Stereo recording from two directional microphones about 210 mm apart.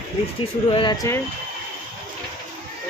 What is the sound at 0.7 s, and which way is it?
Speech, 20° left (ahead or behind).